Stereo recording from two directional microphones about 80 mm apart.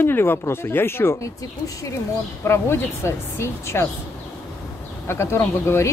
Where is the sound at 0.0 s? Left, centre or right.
Left.